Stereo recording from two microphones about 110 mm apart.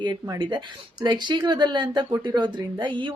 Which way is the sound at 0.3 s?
45° right (ahead or behind).